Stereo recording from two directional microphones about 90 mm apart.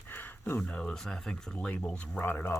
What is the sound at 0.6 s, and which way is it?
Speech, 10° left (ahead or behind).